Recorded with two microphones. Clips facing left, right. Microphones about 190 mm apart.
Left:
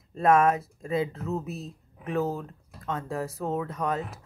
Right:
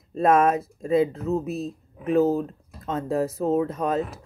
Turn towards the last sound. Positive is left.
turn(degrees=-25)  # may be behind; listen again after turning